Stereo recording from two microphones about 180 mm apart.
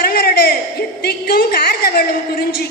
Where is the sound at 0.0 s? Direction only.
60° left (ahead or behind).